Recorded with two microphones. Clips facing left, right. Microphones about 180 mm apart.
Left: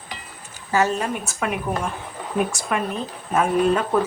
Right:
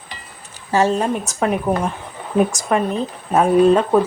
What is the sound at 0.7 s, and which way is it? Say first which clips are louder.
Speech: right 4 dB; 30° right (ahead or behind).